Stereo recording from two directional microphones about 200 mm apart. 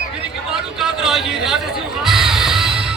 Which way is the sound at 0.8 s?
Centre (ahead or behind).